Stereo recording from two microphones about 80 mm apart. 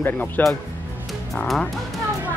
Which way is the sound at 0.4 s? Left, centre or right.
Centre.